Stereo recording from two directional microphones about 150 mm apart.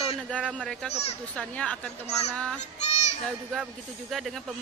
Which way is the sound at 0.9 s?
45° left (ahead or behind).